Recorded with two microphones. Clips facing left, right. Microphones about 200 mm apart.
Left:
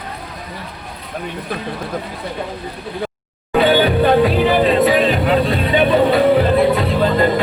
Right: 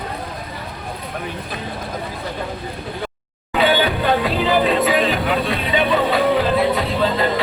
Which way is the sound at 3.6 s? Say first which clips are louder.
Left 4 dB; 45° left (ahead or behind).